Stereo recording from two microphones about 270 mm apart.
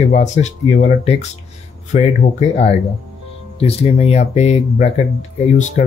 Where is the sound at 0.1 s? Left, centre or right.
Left.